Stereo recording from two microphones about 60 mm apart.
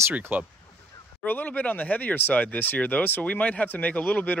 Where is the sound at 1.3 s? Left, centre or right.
Left.